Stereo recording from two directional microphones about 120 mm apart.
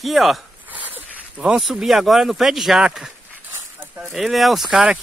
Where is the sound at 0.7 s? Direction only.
15° right (ahead or behind).